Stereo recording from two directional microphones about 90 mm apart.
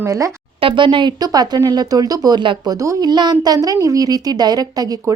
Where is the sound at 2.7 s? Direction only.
40° right (ahead or behind).